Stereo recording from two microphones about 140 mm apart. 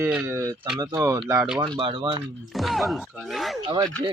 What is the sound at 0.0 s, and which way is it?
Speech, 15° right (ahead or behind).